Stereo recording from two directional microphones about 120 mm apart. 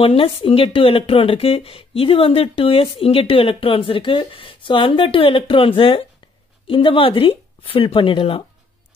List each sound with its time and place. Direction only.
0.0 s speech: 50° left (ahead or behind)